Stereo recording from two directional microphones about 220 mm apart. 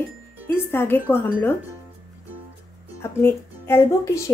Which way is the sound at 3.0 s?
10° left (ahead or behind).